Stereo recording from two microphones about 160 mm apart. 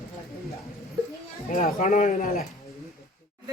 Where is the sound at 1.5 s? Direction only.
50° left (ahead or behind).